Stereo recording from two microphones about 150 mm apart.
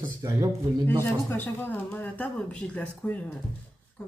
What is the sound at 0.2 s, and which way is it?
Speech, 20° right (ahead or behind).